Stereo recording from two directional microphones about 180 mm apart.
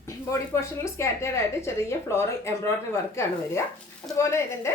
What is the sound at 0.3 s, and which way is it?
A woman's voice, 15° left (ahead or behind).